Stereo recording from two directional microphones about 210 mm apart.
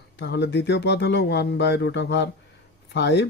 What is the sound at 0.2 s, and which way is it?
Speech, 55° left (ahead or behind).